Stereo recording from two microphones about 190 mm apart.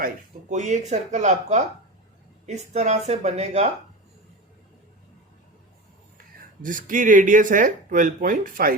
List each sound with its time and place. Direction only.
0.5 s speech: 40° right (ahead or behind)
6.6 s speech: 45° right (ahead or behind)